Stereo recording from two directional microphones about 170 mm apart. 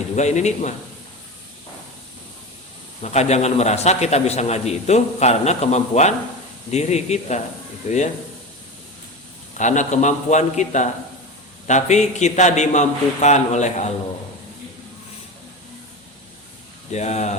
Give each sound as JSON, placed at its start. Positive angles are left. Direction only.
{"t": 0.2, "sound": "a man's voice", "side_deg": 40}
{"t": 3.0, "sound": "a man's voice", "side_deg": 40}
{"t": 9.6, "sound": "a man's voice", "side_deg": 45}
{"t": 16.9, "sound": "a man's voice", "side_deg": 40}